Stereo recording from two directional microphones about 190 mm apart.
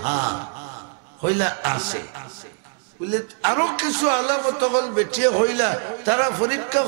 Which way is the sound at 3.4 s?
20° right (ahead or behind).